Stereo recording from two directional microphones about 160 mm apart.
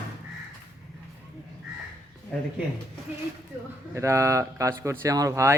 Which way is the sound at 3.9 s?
20° right (ahead or behind).